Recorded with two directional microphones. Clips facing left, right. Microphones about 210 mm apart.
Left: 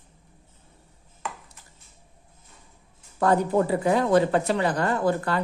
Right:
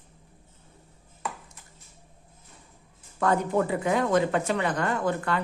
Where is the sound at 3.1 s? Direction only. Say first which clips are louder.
Left 3 dB; 35° left (ahead or behind).